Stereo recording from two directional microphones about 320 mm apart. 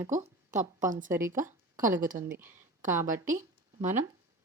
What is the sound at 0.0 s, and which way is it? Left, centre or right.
Speech, centre.